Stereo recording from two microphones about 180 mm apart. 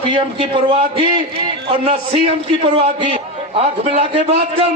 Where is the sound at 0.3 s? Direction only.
30° right (ahead or behind).